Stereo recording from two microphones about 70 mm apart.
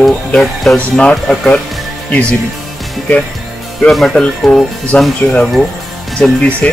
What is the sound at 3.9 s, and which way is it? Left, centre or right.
Speech, centre.